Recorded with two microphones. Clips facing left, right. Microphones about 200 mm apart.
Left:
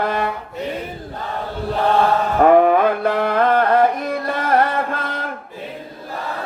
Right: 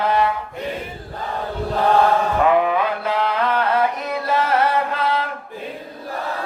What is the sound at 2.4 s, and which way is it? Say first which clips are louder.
Music: left 8 dB; 50° left (ahead or behind).